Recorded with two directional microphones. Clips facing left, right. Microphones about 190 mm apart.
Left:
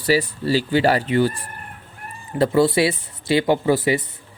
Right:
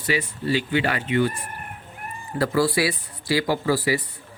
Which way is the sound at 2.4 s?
25° left (ahead or behind).